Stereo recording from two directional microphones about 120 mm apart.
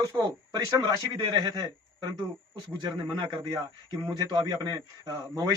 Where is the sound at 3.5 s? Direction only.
30° right (ahead or behind).